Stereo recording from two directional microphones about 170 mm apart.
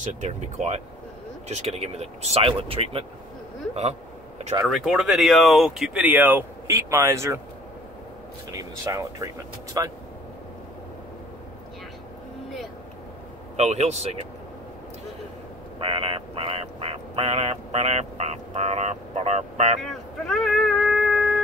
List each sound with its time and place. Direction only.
0.0 s speech: 45° right (ahead or behind)
4.6 s speech: centre (ahead or behind)
8.9 s speech: 20° right (ahead or behind)
13.6 s speech: 40° right (ahead or behind)
15.8 s speech: 30° right (ahead or behind)
19.8 s vehicle: centre (ahead or behind)